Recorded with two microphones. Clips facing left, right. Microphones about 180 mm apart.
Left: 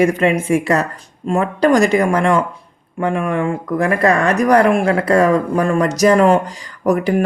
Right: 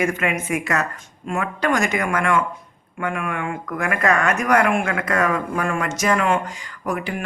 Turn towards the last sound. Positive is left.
turn(degrees=40)  # may be behind; listen again after turning